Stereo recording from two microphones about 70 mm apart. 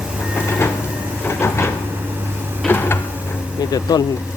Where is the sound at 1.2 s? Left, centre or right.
Left.